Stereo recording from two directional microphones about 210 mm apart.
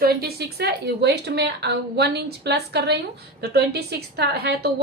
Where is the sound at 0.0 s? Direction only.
45° right (ahead or behind).